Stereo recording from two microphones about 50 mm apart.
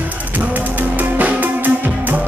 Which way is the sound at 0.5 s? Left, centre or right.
Right.